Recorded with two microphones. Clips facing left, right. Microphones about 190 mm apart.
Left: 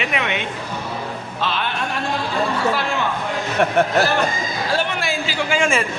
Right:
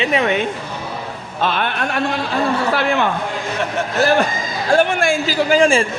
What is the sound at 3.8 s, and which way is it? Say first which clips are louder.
Speech: left 8 dB; 55° left (ahead or behind).